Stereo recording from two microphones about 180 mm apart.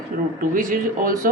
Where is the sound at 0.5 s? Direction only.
50° right (ahead or behind).